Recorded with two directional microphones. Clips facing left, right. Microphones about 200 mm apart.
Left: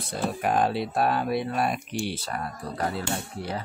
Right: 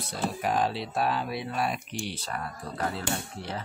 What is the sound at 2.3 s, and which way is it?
Speech, 35° left (ahead or behind).